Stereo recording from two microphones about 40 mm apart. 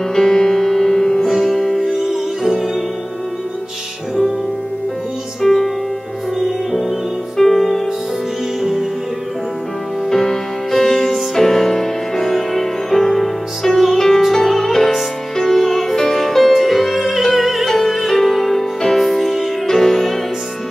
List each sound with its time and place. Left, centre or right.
0.1 s music: centre
1.9 s opera: centre
5.4 s music: centre
10.0 s music: centre